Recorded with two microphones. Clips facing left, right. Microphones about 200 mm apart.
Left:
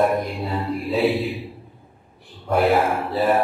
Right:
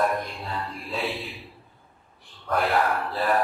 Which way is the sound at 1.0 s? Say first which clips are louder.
Left 14 dB; 45° left (ahead or behind).